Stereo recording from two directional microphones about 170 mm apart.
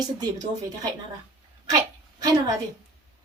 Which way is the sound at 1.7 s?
25° right (ahead or behind).